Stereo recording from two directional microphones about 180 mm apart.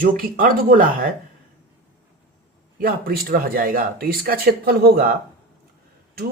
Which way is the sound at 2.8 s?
55° right (ahead or behind).